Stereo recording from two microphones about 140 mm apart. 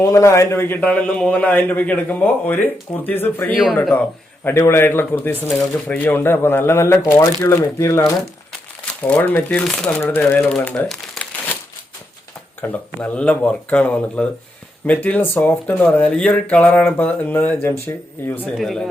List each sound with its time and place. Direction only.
0.0 s speech: 20° left (ahead or behind)
8.8 s speech: 10° left (ahead or behind)
12.6 s speech: 10° left (ahead or behind)
18.5 s speech: centre (ahead or behind)